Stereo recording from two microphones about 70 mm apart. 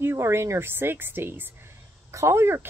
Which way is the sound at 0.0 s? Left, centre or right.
Right.